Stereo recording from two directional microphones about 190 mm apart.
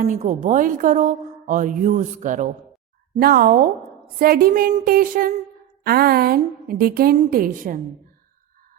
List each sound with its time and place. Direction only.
0.2 s a woman's voice: 40° right (ahead or behind)